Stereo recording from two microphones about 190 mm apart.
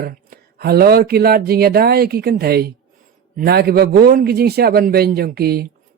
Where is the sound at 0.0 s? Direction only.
50° right (ahead or behind).